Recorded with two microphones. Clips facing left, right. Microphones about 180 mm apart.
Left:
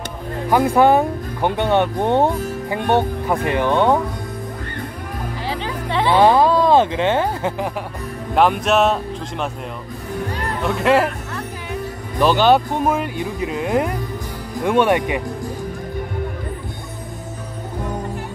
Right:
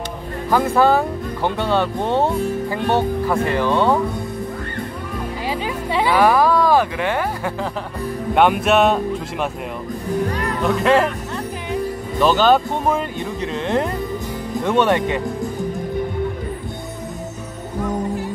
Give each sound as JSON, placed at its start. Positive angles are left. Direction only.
{"t": 0.5, "sound": "speech", "side_deg": 15}
{"t": 5.5, "sound": "music", "side_deg": -10}
{"t": 6.1, "sound": "speech", "side_deg": 25}
{"t": 8.6, "sound": "speech", "side_deg": 0}
{"t": 10.6, "sound": "speech", "side_deg": 0}
{"t": 12.2, "sound": "speech", "side_deg": 10}